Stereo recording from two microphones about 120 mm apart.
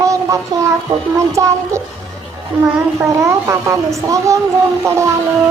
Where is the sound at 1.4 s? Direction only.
25° right (ahead or behind).